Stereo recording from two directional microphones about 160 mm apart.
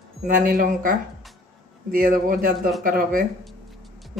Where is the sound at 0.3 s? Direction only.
55° right (ahead or behind).